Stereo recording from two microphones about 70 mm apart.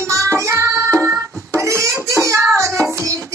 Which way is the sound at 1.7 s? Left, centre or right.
Right.